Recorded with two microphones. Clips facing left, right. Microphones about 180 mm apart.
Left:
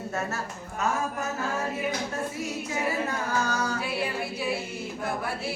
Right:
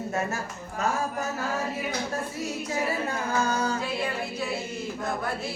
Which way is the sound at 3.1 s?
30° right (ahead or behind).